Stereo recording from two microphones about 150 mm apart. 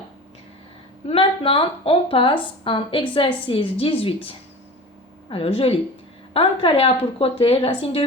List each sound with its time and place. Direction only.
1.0 s speech: 40° left (ahead or behind)